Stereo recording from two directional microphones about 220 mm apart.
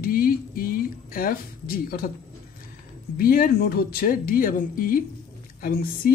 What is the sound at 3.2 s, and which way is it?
Speech, 40° left (ahead or behind).